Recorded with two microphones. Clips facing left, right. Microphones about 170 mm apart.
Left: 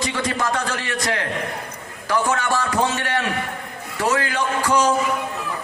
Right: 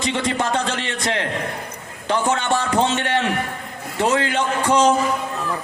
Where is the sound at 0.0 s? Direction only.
25° right (ahead or behind).